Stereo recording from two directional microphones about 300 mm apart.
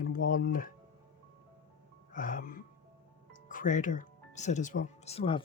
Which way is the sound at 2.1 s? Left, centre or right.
Left.